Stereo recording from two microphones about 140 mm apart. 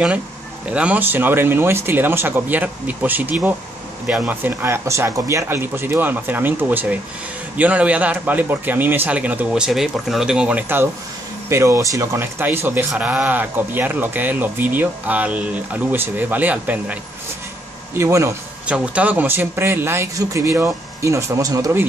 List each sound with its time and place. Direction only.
0.7 s a man's voice: 10° right (ahead or behind)
17.9 s speech: 20° right (ahead or behind)
18.7 s a man's voice: 10° right (ahead or behind)